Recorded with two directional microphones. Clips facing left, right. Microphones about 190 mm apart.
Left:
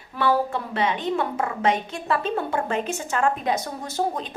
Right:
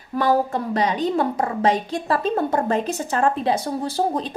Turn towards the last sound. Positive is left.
turn(degrees=-35)  # may be behind; listen again after turning